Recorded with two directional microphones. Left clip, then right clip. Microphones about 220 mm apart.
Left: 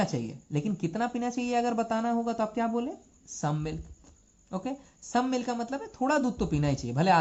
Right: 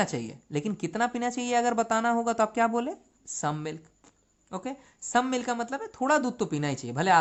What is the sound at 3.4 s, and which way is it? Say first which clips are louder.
A woman's voice: right 2 dB; 30° right (ahead or behind).